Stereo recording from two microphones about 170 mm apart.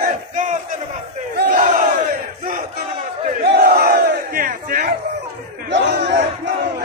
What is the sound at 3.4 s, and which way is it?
Battle cry, 70° right (ahead or behind).